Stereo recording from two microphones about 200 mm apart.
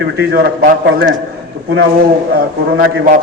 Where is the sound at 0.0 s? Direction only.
55° right (ahead or behind).